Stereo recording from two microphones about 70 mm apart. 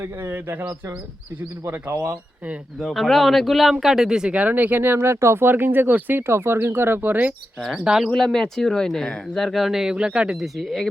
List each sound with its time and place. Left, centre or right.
0.3 s speech: right
2.7 s speech: centre; by 7.3 s right
7.6 s speech: centre
8.1 s speech: centre
10.3 s speech: centre